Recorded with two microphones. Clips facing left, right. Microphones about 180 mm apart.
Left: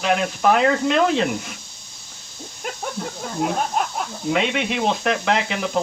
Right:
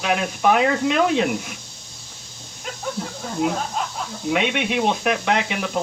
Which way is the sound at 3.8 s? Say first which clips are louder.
Left 4 dB; 55° left (ahead or behind).